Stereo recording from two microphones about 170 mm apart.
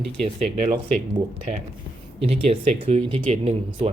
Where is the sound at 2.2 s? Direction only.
35° right (ahead or behind).